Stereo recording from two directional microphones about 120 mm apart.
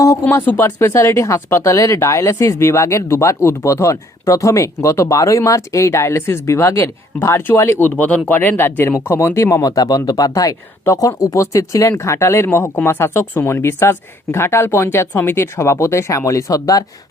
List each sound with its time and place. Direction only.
0.0 s speech: 25° left (ahead or behind)